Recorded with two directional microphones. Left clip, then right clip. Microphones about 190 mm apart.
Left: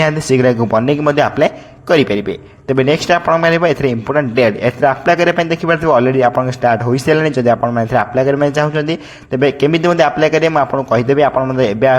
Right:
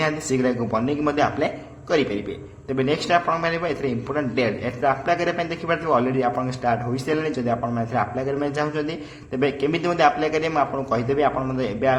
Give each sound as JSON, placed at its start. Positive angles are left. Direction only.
{"t": 0.0, "sound": "a man's voice", "side_deg": 40}